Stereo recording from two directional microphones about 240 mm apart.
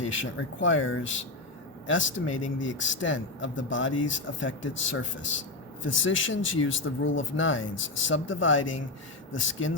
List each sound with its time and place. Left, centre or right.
0.1 s speech: left